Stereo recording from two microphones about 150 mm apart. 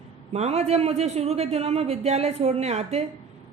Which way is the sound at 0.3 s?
45° right (ahead or behind).